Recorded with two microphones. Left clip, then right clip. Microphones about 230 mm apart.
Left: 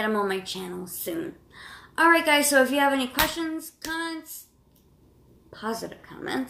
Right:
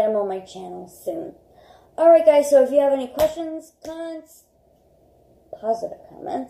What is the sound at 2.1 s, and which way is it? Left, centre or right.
A woman's voice, left.